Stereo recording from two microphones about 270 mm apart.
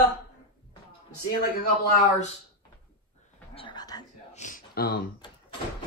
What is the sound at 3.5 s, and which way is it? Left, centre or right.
Whispering, centre.